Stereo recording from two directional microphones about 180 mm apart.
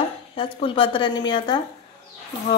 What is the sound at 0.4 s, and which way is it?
A woman's voice, 30° left (ahead or behind).